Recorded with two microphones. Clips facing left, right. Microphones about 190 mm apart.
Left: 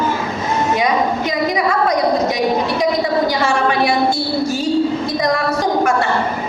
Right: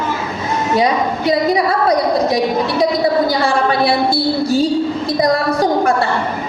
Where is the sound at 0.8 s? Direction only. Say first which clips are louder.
Right 1 dB; 35° right (ahead or behind).